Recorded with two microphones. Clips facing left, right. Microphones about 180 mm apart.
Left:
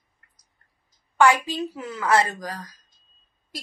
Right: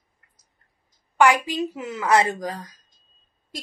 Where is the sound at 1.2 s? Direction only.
15° right (ahead or behind).